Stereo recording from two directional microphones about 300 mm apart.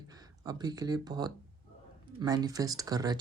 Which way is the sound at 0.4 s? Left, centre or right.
Centre.